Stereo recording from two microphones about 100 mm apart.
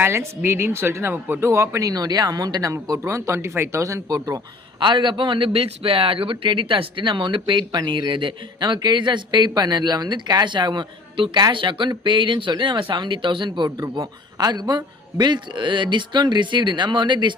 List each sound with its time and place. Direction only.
0.0 s speech: 25° right (ahead or behind)
4.8 s a man's voice: 50° right (ahead or behind)
13.7 s speech: 40° right (ahead or behind)